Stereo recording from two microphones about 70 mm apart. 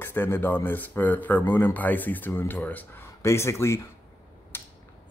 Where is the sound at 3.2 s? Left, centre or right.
Left.